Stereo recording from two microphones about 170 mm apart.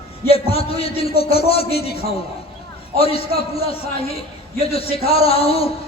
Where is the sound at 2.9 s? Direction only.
35° left (ahead or behind).